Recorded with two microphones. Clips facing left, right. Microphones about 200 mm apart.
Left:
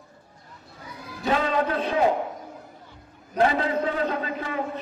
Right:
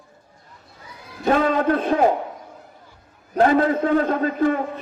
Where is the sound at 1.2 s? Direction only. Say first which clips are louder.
Right 5 dB; 50° right (ahead or behind).